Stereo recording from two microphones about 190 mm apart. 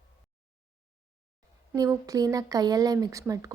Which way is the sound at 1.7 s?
20° right (ahead or behind).